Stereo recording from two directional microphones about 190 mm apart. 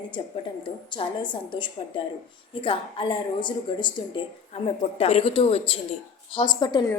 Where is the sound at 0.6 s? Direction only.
25° left (ahead or behind).